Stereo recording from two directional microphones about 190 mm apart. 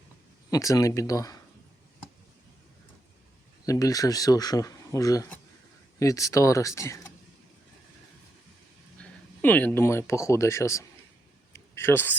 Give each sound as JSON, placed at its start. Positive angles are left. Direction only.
{"t": 0.5, "sound": "speech", "side_deg": 15}
{"t": 3.7, "sound": "speech", "side_deg": 20}
{"t": 9.0, "sound": "speech", "side_deg": 10}
{"t": 11.5, "sound": "a sound", "side_deg": 15}